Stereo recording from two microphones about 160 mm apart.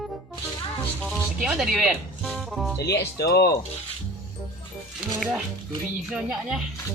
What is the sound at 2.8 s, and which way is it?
Speech, 90° left.